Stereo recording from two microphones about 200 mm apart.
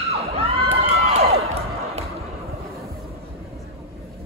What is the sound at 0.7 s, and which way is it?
Crowd, 30° right (ahead or behind).